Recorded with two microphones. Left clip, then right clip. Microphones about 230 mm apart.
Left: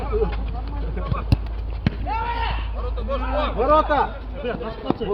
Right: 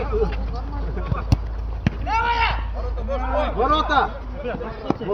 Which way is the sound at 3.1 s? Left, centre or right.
Left.